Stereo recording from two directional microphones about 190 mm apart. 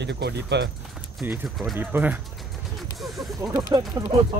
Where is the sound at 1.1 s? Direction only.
10° right (ahead or behind).